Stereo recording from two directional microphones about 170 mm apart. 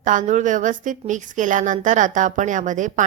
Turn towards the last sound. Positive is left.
turn(degrees=-50)  # may be behind; listen again after turning